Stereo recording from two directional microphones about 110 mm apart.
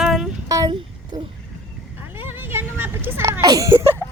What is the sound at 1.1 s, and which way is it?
Speech, 35° right (ahead or behind).